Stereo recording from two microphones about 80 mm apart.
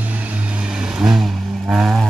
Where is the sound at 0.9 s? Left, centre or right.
Centre.